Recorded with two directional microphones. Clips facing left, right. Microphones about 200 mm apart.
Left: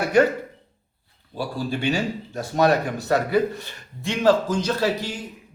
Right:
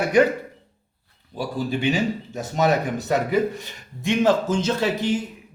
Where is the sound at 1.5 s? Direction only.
20° right (ahead or behind).